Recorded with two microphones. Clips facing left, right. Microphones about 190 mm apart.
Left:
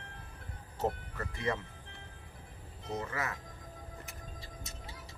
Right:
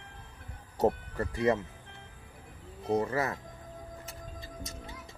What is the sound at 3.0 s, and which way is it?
Speech, 35° right (ahead or behind).